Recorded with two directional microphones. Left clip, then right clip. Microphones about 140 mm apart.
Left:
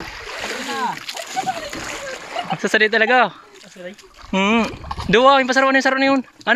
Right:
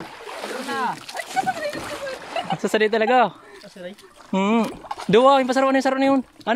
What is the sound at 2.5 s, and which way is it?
Speech, 15° right (ahead or behind).